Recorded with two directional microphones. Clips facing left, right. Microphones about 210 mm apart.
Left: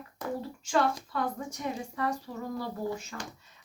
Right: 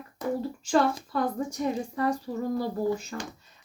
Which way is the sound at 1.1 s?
35° right (ahead or behind).